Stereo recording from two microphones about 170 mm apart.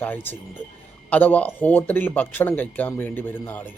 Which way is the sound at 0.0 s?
10° left (ahead or behind).